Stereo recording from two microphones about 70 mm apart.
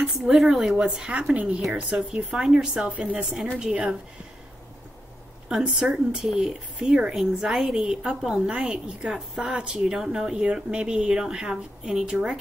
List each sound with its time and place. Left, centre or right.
0.0 s a woman's voice: centre
5.5 s speech: centre